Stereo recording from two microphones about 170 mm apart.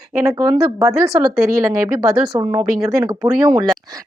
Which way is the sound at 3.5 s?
20° right (ahead or behind).